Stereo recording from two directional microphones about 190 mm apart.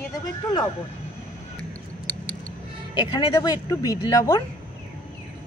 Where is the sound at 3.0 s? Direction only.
20° left (ahead or behind).